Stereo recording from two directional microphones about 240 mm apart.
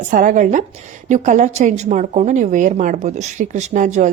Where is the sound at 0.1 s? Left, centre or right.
Right.